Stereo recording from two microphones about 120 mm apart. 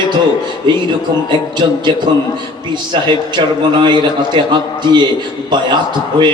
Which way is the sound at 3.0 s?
40° right (ahead or behind).